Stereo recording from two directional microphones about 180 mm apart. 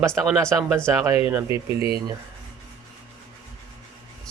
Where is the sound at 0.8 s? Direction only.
15° right (ahead or behind).